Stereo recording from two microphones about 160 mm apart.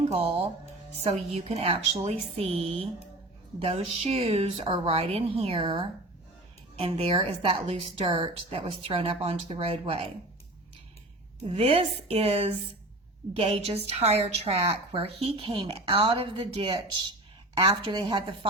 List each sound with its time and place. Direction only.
0.0 s a woman's voice: 40° right (ahead or behind)
11.4 s a woman's voice: 35° right (ahead or behind)